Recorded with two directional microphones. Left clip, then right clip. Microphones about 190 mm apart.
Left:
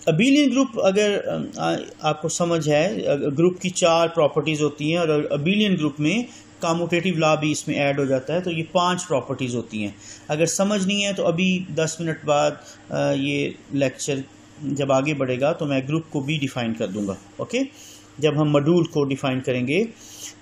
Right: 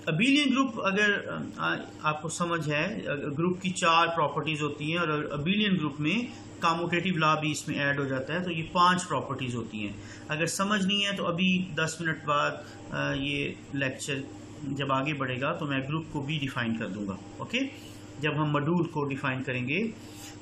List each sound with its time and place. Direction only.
0.0 s a man's voice: 20° left (ahead or behind)
18.2 s a man's voice: 20° left (ahead or behind)